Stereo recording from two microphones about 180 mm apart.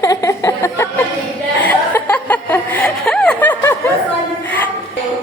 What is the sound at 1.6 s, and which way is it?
Chuckle, 10° left (ahead or behind).